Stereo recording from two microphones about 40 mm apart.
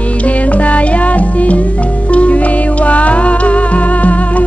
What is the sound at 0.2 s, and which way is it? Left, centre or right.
Music, left.